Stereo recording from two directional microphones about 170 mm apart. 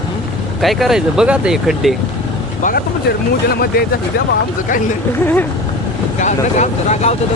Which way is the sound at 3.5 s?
65° left (ahead or behind).